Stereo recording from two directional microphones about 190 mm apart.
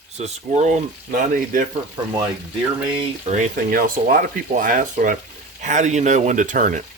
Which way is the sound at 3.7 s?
50° right (ahead or behind).